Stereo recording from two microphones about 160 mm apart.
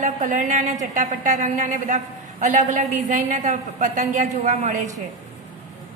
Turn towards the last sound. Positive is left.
turn(degrees=-45)  # may be behind; listen again after turning